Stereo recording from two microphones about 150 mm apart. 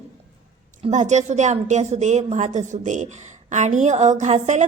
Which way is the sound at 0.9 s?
50° right (ahead or behind).